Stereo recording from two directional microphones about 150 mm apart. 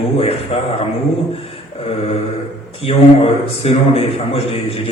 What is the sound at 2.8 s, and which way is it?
A man's voice, 40° left (ahead or behind).